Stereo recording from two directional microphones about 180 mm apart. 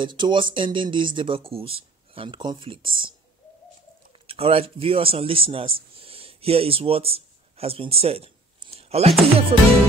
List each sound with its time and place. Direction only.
0.0 s speech: 25° right (ahead or behind)
4.3 s speech: 30° right (ahead or behind)
9.5 s music: 35° right (ahead or behind)